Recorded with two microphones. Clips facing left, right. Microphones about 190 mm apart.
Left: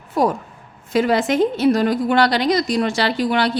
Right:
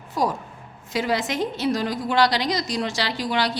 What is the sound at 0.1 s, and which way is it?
A woman's voice, 60° left (ahead or behind).